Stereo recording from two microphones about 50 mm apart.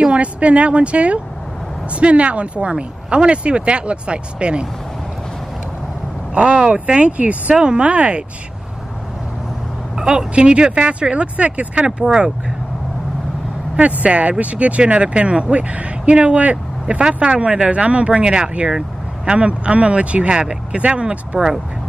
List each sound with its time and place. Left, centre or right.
0.0 s speech: right
6.3 s speech: centre
9.9 s speech: centre
13.7 s speech: right
18.7 s vehicle: centre
19.3 s speech: right